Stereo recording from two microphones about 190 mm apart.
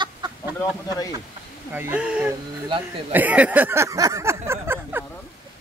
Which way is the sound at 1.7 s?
10° right (ahead or behind).